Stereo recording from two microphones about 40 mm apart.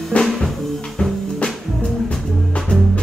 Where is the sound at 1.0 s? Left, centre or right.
Left.